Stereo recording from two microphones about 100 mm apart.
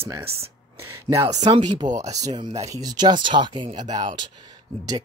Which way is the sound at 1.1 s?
35° right (ahead or behind).